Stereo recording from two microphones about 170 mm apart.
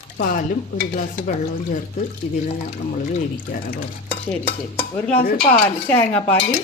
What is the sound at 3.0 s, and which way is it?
Speech, 60° left (ahead or behind).